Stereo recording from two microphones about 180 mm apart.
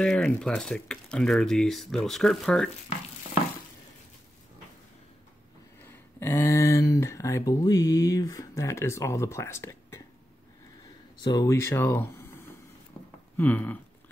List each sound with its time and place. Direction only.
0.0 s speech: 5° left (ahead or behind)
5.9 s speech: 10° left (ahead or behind)
11.2 s speech: 20° left (ahead or behind)